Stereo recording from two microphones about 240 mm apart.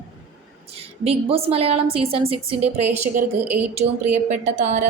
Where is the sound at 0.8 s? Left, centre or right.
Right.